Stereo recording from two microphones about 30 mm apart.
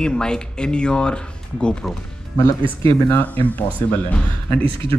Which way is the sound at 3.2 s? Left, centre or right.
Left.